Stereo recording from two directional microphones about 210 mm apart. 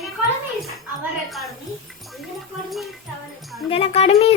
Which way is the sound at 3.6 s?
25° left (ahead or behind).